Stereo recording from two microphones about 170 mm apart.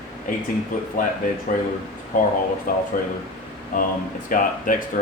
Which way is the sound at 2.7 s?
55° left (ahead or behind).